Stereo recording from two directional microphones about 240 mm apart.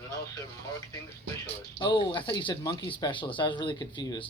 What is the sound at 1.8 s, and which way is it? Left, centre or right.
Speech, centre.